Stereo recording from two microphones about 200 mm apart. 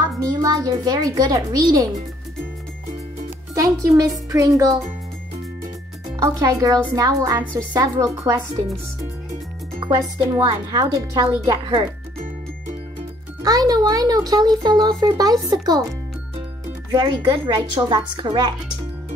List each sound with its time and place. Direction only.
0.2 s a child's voice: 15° right (ahead or behind)
3.5 s a child's voice: 15° right (ahead or behind)
6.1 s a child's voice: 20° right (ahead or behind)
9.8 s speech: 20° right (ahead or behind)
13.4 s speech: 20° right (ahead or behind)
16.9 s speech: 25° right (ahead or behind)